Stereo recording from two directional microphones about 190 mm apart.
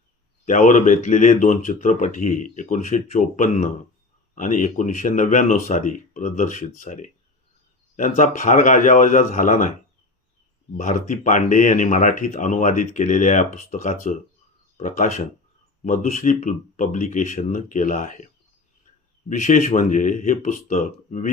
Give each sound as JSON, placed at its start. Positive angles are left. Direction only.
{"t": 0.4, "sound": "speech", "side_deg": 45}
{"t": 10.8, "sound": "speech", "side_deg": 40}
{"t": 19.3, "sound": "speech", "side_deg": 40}